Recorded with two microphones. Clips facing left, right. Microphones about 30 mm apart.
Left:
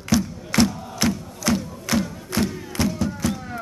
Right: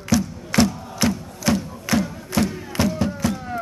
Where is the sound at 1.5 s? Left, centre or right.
Centre.